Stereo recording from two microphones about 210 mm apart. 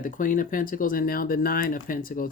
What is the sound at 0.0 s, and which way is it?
Speech, 40° left (ahead or behind).